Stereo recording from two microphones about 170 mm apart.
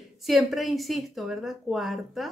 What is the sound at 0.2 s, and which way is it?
A woman's voice, centre (ahead or behind).